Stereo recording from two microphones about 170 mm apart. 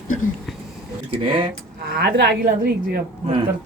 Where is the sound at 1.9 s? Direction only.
75° right (ahead or behind).